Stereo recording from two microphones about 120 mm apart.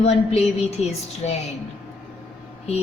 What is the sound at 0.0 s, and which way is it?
A woman's voice, 60° left (ahead or behind).